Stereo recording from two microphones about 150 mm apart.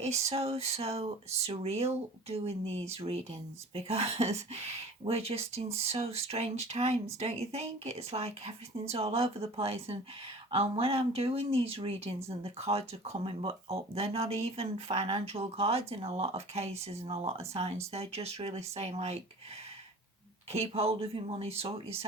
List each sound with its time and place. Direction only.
0.2 s speech: 45° right (ahead or behind)
20.5 s speech: 45° right (ahead or behind)